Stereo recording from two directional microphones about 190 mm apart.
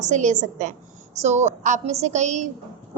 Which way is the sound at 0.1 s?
40° right (ahead or behind).